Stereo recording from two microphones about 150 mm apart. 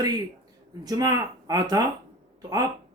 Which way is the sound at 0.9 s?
25° right (ahead or behind).